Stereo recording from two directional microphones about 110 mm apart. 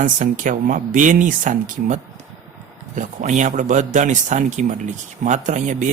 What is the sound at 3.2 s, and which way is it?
Speech, 90° right.